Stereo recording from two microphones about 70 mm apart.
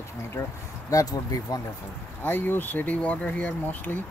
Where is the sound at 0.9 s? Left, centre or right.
Left.